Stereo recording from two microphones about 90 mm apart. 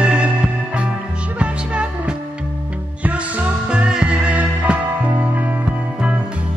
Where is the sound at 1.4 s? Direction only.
10° right (ahead or behind).